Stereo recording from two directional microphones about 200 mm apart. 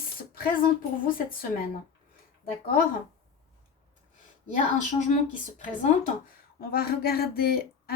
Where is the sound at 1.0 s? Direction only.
45° left (ahead or behind).